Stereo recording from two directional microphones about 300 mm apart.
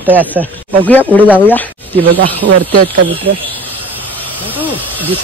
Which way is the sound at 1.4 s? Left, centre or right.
Centre.